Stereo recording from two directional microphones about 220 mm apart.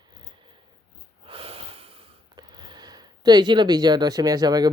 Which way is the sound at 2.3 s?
20° right (ahead or behind).